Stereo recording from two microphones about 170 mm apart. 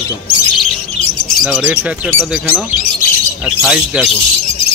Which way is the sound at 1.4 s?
5° left (ahead or behind).